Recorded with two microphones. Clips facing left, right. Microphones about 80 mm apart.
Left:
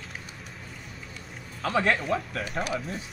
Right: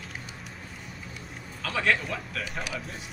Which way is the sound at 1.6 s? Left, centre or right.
Left.